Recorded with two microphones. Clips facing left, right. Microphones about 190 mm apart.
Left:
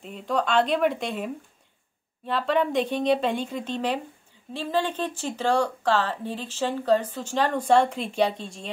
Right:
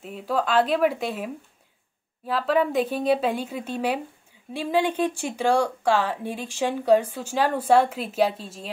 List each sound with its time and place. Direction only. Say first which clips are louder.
0.0 s a woman's voice: right 1 dB; 5° right (ahead or behind)